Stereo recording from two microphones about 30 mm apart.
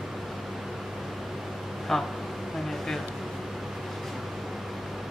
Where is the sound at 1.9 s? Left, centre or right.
Centre.